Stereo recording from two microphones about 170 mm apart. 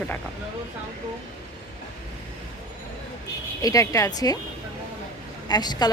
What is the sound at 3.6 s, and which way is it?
Speech, 20° left (ahead or behind).